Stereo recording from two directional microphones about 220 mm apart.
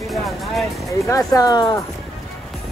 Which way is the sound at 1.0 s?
15° left (ahead or behind).